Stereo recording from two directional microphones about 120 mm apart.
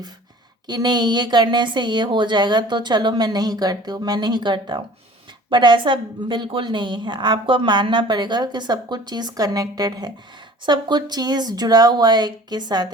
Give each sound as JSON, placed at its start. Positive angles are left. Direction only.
{"t": 0.7, "sound": "a woman's voice", "side_deg": -35}